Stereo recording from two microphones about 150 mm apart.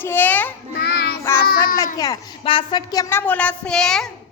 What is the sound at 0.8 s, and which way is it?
Child singing, 90° left.